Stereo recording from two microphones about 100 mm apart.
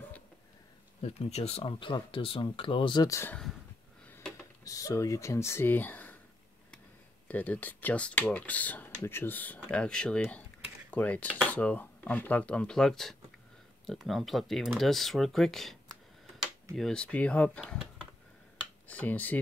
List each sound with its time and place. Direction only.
1.0 s speech: 90° left; by 3.1 s 50° left (ahead or behind)
3.1 s speech: 25° left (ahead or behind)
4.6 s speech: 35° left (ahead or behind); by 6.1 s 20° left (ahead or behind)
7.2 s speech: 15° left (ahead or behind)
18.9 s speech: 15° left (ahead or behind)